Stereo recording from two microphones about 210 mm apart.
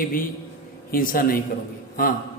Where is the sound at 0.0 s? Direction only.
40° left (ahead or behind).